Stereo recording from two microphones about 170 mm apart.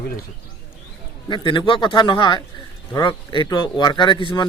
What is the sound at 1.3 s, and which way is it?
Speech, 30° left (ahead or behind).